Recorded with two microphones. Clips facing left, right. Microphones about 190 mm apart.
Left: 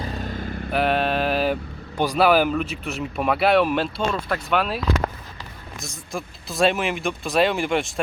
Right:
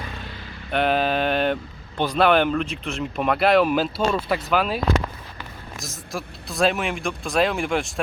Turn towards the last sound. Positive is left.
turn(degrees=0)  # may be behind; listen again after turning